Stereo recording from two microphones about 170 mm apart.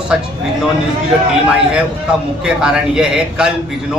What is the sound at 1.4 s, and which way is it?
A man's voice, 5° right (ahead or behind).